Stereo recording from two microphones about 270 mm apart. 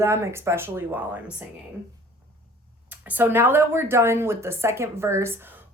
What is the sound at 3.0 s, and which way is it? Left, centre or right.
Speech, centre.